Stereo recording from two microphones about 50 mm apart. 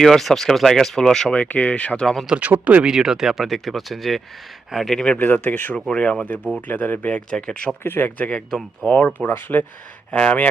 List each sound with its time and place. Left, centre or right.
0.0 s speech: centre
1.3 s speech: left
2.4 s speech: right
2.8 s speech: centre
4.9 s speech: left
5.2 s speech: left
5.9 s speech: left
6.7 s speech: left
7.1 s speech: centre
7.9 s speech: left
8.2 s speech: left
10.1 s speech: left